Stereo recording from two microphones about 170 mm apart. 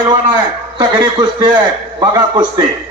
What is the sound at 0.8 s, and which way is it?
A man's voice, 25° right (ahead or behind).